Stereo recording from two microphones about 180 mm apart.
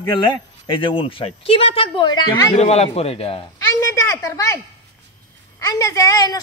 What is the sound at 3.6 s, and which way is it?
Speech, 15° left (ahead or behind).